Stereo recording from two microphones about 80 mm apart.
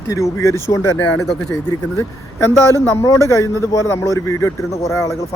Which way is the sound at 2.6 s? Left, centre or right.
Left.